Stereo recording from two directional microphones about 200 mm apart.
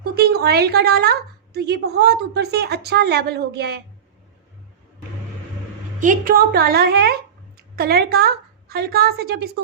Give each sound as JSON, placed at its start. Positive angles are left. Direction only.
{"t": 0.0, "sound": "a woman's voice", "side_deg": -50}
{"t": 6.0, "sound": "a woman's voice", "side_deg": -40}